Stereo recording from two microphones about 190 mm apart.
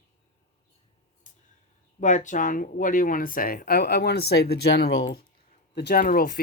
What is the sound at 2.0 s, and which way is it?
Speech, 40° left (ahead or behind).